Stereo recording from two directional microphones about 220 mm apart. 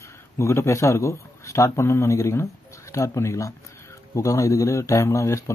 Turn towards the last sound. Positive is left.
turn(degrees=15)  # may be behind; listen again after turning